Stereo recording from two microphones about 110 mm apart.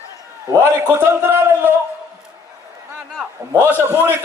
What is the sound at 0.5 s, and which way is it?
Speech, 25° right (ahead or behind).